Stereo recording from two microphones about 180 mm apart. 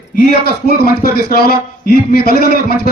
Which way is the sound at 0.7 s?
55° left (ahead or behind).